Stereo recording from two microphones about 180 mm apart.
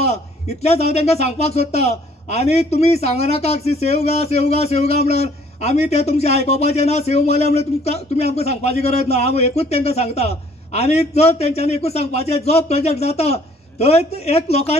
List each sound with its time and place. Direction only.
0.0 s speech: 35° left (ahead or behind)